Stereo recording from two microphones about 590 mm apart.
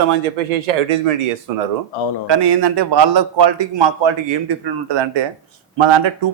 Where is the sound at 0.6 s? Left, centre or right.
Right.